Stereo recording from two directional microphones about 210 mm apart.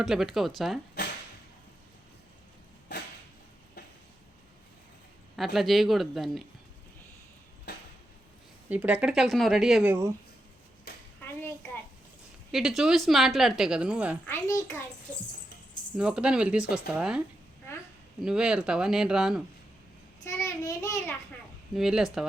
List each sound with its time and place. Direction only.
0.0 s speech: centre (ahead or behind)
2.9 s a sound: 50° left (ahead or behind)
5.4 s speech: centre (ahead or behind)
7.7 s a sound: 50° left (ahead or behind)
8.7 s speech: 5° right (ahead or behind)
10.9 s a sound: 50° left (ahead or behind)
11.3 s a sound: 10° left (ahead or behind)
12.5 s speech: centre (ahead or behind)
14.3 s a child's voice: 15° left (ahead or behind)
16.0 s speech: 5° right (ahead or behind)
20.2 s a child's voice: 15° left (ahead or behind)
21.8 s speech: centre (ahead or behind)